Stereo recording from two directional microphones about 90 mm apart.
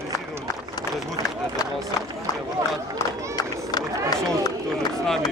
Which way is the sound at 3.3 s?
50° left (ahead or behind).